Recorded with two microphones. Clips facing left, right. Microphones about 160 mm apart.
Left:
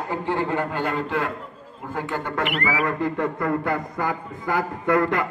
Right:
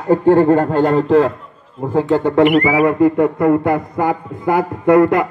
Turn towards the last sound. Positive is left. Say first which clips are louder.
# right 10 dB
turn(degrees=-20)  # may be behind; listen again after turning